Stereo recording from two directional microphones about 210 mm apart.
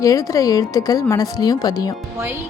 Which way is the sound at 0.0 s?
15° left (ahead or behind).